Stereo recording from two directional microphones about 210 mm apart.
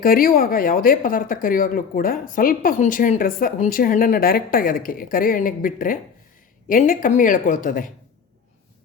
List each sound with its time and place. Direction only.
0.0 s speech: 45° left (ahead or behind)